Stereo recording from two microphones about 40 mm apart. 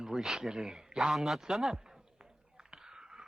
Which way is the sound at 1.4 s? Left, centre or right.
Centre.